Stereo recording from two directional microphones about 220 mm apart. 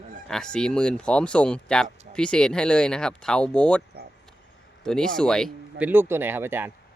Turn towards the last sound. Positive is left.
turn(degrees=-10)  # may be behind; listen again after turning